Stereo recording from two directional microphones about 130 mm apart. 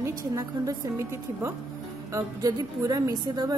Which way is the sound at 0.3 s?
25° right (ahead or behind).